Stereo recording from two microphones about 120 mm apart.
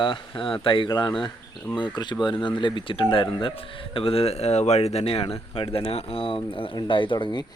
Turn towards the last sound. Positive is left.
turn(degrees=40)  # may be behind; listen again after turning